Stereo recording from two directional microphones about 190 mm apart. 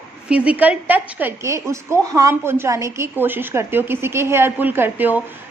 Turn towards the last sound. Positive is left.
turn(degrees=-10)  # may be behind; listen again after turning